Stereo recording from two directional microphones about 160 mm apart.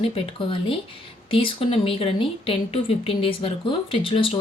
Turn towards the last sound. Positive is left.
turn(degrees=35)  # may be behind; listen again after turning